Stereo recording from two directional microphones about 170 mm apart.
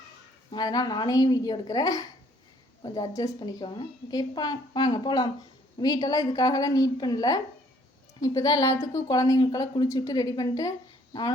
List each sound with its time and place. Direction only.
0.5 s a woman's voice: 25° left (ahead or behind)